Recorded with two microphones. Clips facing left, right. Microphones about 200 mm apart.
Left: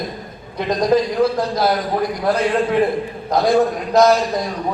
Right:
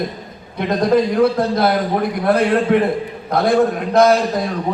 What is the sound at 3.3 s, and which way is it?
Speech, 55° right (ahead or behind).